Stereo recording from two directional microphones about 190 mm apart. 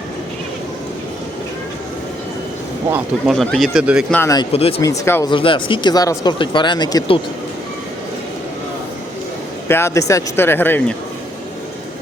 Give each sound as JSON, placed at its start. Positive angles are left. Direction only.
{"t": 2.9, "sound": "speech", "side_deg": 0}
{"t": 4.1, "sound": "speech", "side_deg": 15}
{"t": 5.3, "sound": "speech", "side_deg": 25}
{"t": 9.6, "sound": "speech", "side_deg": 15}